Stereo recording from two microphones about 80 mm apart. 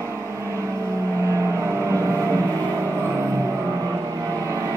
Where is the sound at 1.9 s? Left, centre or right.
Right.